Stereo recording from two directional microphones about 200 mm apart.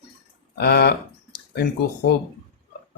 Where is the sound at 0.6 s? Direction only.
55° left (ahead or behind).